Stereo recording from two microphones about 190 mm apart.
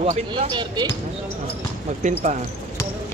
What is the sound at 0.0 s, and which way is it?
Speech, 30° right (ahead or behind).